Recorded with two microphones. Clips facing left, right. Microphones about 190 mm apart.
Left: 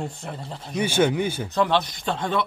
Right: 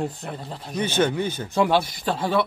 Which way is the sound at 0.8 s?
10° left (ahead or behind).